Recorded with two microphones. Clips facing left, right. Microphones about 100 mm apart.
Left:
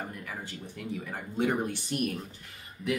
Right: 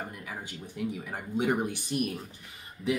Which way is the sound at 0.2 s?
10° right (ahead or behind).